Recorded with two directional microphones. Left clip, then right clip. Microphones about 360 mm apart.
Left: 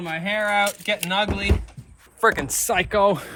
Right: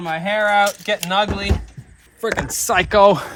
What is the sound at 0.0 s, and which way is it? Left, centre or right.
Speech, centre.